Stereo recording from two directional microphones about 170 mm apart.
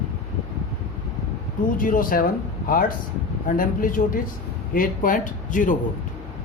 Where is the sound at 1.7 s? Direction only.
55° left (ahead or behind).